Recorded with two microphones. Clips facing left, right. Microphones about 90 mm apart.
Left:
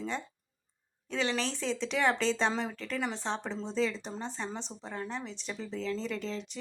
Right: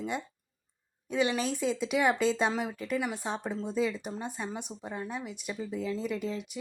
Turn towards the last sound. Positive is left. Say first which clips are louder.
# right 2 dB
turn(degrees=-10)  # may be behind; listen again after turning